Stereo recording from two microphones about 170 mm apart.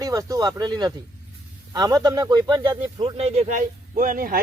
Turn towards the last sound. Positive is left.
turn(degrees=-55)  # may be behind; listen again after turning